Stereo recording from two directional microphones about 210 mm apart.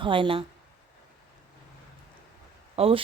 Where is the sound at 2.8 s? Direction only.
25° right (ahead or behind).